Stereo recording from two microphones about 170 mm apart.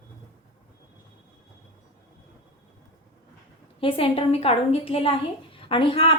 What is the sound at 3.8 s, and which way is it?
A woman's voice, 35° left (ahead or behind).